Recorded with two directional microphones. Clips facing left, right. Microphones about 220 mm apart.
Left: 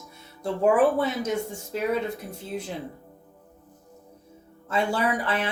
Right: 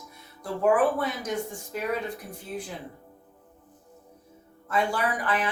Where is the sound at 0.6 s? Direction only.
25° left (ahead or behind).